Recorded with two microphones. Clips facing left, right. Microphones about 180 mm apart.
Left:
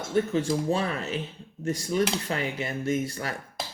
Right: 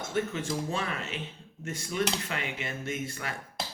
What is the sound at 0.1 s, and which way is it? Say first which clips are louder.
Speech: left 7 dB; 35° left (ahead or behind).